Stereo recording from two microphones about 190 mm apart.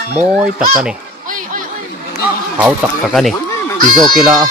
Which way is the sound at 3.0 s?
Centre (ahead or behind).